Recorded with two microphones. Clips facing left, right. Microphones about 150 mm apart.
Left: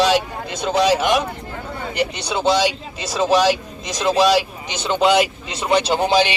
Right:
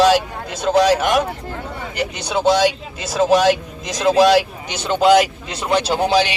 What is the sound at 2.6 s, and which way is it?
Speech, 50° right (ahead or behind).